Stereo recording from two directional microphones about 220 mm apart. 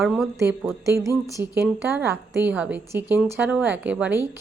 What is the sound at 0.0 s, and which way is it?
A woman's voice, centre (ahead or behind).